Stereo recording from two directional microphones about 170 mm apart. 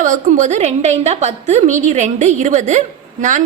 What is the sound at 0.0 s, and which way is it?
A woman's voice, 50° right (ahead or behind).